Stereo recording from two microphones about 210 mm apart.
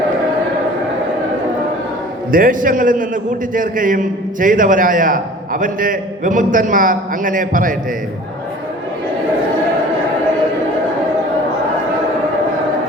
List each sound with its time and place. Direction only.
2.3 s a man's voice: 40° right (ahead or behind)